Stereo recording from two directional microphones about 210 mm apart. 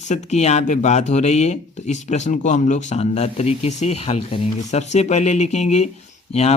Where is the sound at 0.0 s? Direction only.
35° left (ahead or behind).